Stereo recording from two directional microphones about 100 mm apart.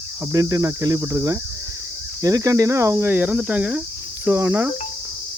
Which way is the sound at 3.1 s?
15° right (ahead or behind).